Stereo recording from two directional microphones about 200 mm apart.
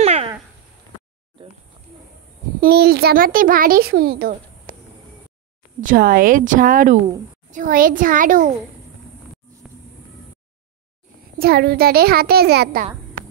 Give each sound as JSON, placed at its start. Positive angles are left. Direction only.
{"t": 0.0, "sound": "cat", "side_deg": -30}
{"t": 2.6, "sound": "a child's voice", "side_deg": -50}
{"t": 5.8, "sound": "a child's voice", "side_deg": -45}
{"t": 11.3, "sound": "a child's voice", "side_deg": -50}